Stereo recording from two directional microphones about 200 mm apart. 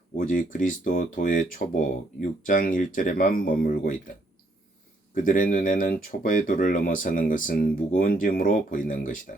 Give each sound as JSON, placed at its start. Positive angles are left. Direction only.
{"t": 0.2, "sound": "speech", "side_deg": 40}
{"t": 5.1, "sound": "speech", "side_deg": 40}